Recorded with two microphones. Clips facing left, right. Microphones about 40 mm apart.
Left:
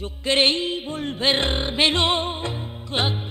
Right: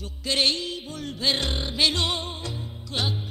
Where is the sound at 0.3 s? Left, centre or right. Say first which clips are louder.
Left 5 dB; left.